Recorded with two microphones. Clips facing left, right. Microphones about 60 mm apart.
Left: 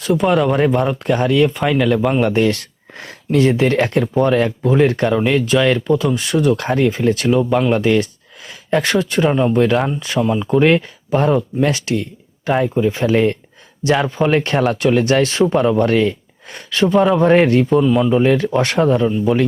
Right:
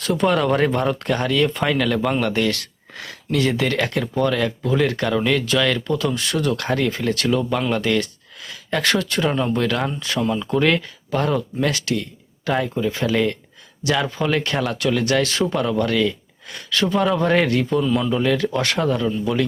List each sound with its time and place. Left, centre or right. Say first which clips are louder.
0.0 s speech: left 4 dB; centre; by 19.5 s left